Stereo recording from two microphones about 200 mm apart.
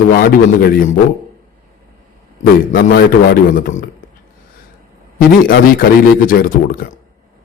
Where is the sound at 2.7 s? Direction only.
50° left (ahead or behind).